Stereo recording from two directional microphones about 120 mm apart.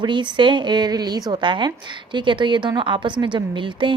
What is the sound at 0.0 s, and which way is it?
A woman's voice, 40° right (ahead or behind).